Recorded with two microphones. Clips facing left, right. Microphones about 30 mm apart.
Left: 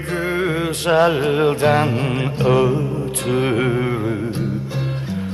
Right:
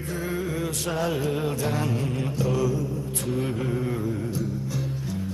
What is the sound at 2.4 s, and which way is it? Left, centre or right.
Mantra, left.